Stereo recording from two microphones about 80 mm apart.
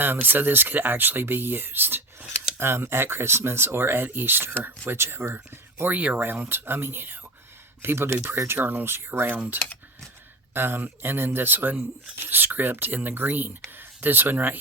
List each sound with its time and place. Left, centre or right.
0.0 s speech: right
10.5 s speech: right